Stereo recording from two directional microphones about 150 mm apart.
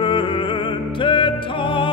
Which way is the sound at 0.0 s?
35° left (ahead or behind).